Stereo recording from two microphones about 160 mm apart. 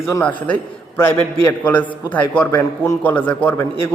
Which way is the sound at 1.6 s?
10° left (ahead or behind).